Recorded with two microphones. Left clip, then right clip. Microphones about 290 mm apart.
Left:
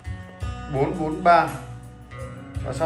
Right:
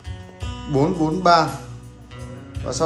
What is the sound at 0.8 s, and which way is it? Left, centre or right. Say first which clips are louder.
Speech: right 4 dB; centre.